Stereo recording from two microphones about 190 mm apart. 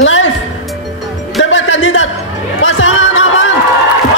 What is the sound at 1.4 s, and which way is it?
Music, 90° left.